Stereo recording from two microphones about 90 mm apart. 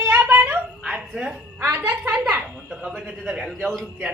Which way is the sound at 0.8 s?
5° right (ahead or behind).